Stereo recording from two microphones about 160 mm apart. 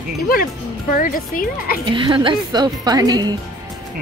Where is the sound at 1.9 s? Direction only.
30° right (ahead or behind).